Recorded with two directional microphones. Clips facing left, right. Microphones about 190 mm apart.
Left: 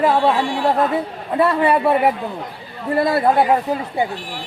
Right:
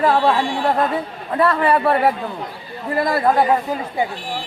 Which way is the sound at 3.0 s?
25° left (ahead or behind).